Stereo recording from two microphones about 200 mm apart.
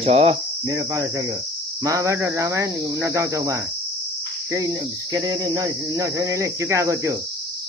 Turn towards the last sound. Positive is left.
turn(degrees=-15)  # may be behind; listen again after turning